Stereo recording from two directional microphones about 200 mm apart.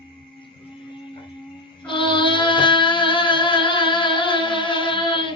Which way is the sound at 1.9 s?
25° left (ahead or behind).